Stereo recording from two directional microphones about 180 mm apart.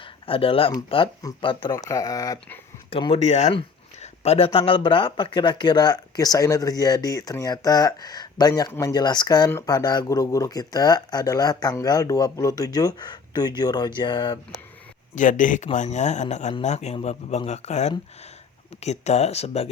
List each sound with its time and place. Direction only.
0.0 s a sound: 30° left (ahead or behind)
0.9 s speech: 30° left (ahead or behind)
2.9 s speech: 30° left (ahead or behind)
15.1 s speech: 45° left (ahead or behind)